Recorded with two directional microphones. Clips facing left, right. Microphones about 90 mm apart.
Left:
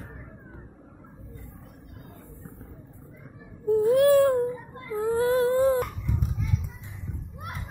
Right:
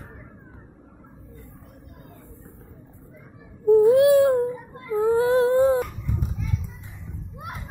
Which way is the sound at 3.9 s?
20° right (ahead or behind).